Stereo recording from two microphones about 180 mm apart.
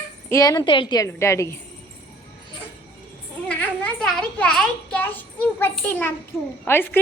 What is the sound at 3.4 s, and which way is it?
A child's voice, 5° left (ahead or behind).